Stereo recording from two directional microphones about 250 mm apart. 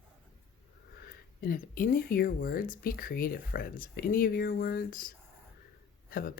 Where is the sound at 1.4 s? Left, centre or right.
Left.